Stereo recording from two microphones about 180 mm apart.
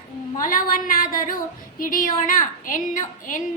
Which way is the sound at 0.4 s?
50° left (ahead or behind).